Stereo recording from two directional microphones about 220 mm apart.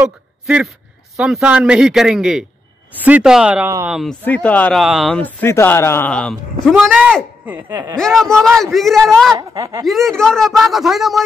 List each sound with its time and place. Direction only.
0.0 s speech: 5° right (ahead or behind)
4.2 s speech: 5° left (ahead or behind); by 7.9 s 10° right (ahead or behind)
7.9 s speech: centre (ahead or behind)
9.4 s speech: 20° right (ahead or behind)
9.8 s speech: centre (ahead or behind)